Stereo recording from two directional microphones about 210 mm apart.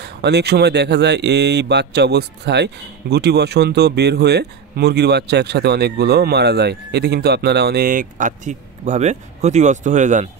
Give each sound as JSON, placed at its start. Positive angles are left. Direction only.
{"t": 0.0, "sound": "speech", "side_deg": -50}